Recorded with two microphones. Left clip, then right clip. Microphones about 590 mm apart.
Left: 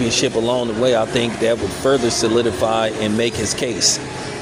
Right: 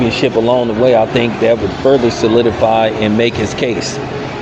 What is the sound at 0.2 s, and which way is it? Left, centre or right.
Speech, left.